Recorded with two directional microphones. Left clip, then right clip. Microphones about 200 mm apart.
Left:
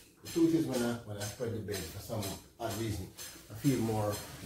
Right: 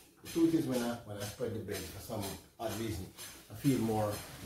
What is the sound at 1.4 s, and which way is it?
Speech, 25° right (ahead or behind).